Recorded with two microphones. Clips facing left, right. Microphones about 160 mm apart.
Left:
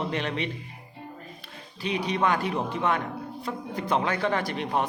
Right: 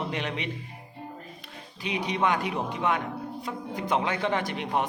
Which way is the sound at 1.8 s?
15° right (ahead or behind).